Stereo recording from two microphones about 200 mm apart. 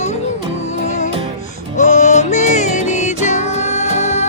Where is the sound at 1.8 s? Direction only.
35° left (ahead or behind).